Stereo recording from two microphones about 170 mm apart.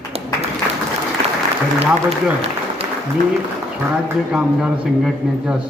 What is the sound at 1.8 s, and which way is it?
A man's voice, 35° right (ahead or behind).